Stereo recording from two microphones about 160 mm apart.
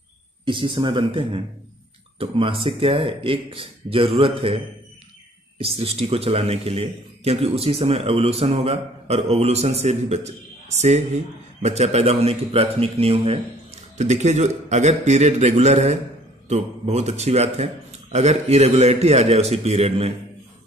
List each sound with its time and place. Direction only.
0.5 s speech: 30° right (ahead or behind)
5.6 s speech: 40° right (ahead or behind)
11.6 s a man's voice: 40° right (ahead or behind)